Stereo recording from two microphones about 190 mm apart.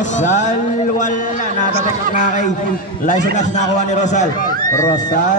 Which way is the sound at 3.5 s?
40° left (ahead or behind).